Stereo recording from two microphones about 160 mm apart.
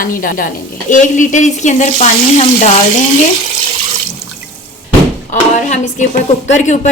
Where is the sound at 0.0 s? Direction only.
60° left (ahead or behind); by 2.7 s 40° left (ahead or behind).